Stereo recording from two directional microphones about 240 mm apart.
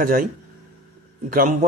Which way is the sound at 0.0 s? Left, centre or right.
Right.